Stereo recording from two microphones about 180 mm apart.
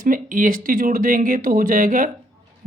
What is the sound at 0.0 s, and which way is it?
Speech, 50° right (ahead or behind).